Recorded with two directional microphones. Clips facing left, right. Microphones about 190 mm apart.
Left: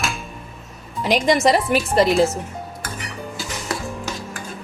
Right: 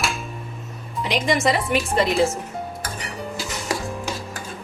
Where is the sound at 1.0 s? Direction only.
40° left (ahead or behind).